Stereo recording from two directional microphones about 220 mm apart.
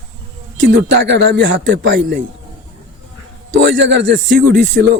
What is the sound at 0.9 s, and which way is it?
Speech, 50° right (ahead or behind).